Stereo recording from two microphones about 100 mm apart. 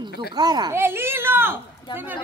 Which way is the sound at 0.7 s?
25° right (ahead or behind).